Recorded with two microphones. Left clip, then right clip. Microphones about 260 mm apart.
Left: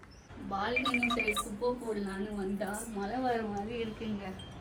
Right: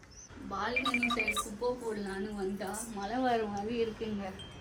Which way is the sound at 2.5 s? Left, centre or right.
Centre.